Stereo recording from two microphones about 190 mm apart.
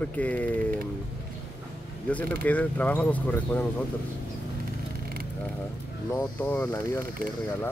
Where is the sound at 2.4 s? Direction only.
5° left (ahead or behind).